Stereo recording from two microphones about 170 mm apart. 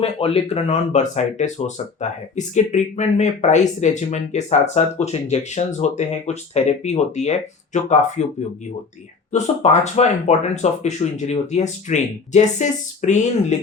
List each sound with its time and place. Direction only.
0.0 s speech: 35° left (ahead or behind)
9.8 s speech: 40° left (ahead or behind)